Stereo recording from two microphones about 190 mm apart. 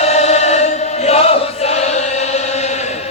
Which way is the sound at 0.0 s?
35° left (ahead or behind).